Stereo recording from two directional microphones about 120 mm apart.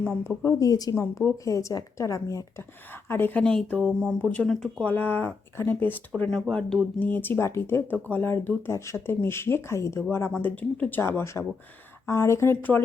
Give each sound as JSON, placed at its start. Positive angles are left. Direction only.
{"t": 0.3, "sound": "a woman's voice", "side_deg": 25}
{"t": 4.9, "sound": "speech", "side_deg": 15}
{"t": 7.0, "sound": "a woman's voice", "side_deg": 15}